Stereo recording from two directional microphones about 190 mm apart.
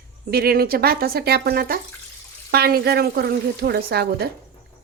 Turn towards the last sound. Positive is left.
turn(degrees=-55)  # may be behind; listen again after turning